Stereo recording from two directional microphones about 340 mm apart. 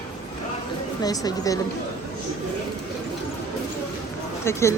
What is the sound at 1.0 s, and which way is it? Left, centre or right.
Speech, centre.